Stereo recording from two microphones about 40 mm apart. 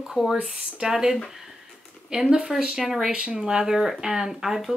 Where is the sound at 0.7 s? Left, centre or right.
Centre.